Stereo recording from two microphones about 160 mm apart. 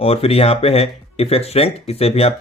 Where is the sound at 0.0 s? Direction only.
40° left (ahead or behind).